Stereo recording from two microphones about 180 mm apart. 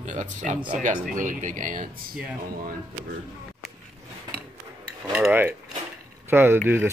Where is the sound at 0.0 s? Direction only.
45° right (ahead or behind).